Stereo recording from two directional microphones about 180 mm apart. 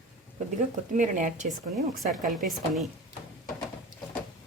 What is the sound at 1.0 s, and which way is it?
Speech, 45° right (ahead or behind).